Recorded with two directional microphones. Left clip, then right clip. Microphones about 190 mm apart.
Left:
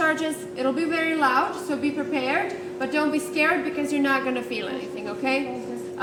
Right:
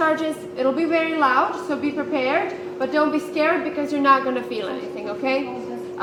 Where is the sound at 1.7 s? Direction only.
30° left (ahead or behind).